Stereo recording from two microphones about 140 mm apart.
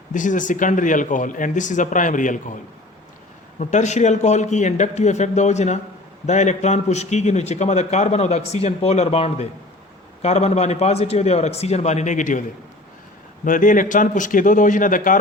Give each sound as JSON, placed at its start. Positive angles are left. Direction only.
{"t": 0.1, "sound": "a man's voice", "side_deg": 65}
{"t": 3.6, "sound": "a man's voice", "side_deg": 60}
{"t": 13.4, "sound": "a man's voice", "side_deg": 70}